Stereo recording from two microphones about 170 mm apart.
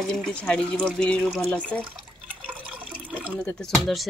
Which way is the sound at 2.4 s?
10° right (ahead or behind).